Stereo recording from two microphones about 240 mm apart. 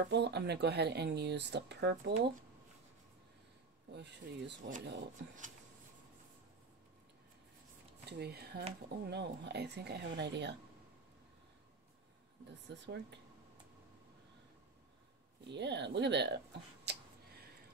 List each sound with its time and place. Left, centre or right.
0.1 s speech: right
3.9 s speech: right
8.1 s speech: right
12.6 s speech: right
15.5 s speech: right
16.9 s a sound: right